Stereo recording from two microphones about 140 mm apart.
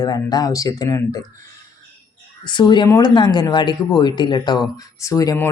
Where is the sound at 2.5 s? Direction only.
30° left (ahead or behind).